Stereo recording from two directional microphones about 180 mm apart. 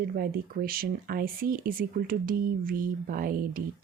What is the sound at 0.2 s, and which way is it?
Speech, 55° right (ahead or behind).